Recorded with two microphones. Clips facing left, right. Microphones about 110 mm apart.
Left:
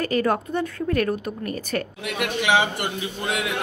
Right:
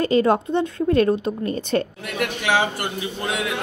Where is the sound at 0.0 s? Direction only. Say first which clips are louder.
Right 4 dB; 25° right (ahead or behind).